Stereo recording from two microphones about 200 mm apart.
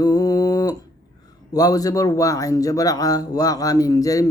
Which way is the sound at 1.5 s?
20° left (ahead or behind).